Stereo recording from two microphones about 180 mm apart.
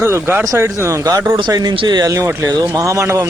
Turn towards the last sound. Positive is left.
turn(degrees=-15)  # may be behind; listen again after turning